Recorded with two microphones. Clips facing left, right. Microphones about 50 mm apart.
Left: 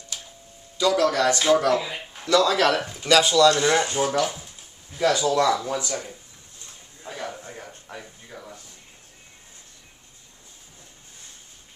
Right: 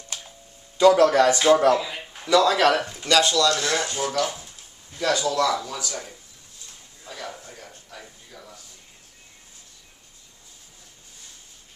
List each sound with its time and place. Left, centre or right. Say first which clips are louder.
0.7 s speech: right 5 dB; right
1.2 s speech: right 2 dB; centre
1.7 s speech: right 2 dB; centre
2.2 s speech: right 1 dB; centre
3.4 s speech: left 4 dB; left
7.0 s a sound: left 3 dB; left